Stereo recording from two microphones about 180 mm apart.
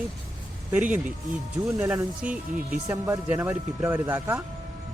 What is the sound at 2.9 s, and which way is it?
Speech, 20° right (ahead or behind).